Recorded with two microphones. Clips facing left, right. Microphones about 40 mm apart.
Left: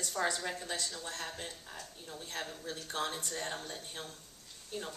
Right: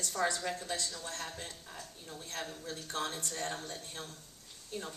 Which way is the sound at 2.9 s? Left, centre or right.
Left.